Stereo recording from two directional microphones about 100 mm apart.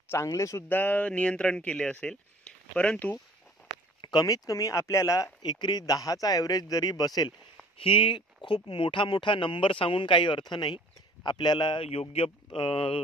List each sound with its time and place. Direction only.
0.1 s speech: 30° left (ahead or behind)
0.7 s speech: 20° left (ahead or behind)
4.0 s speech: 45° left (ahead or behind)
7.8 s speech: 60° left (ahead or behind)
11.8 s a man's voice: 90° left
12.4 s speech: 60° left (ahead or behind)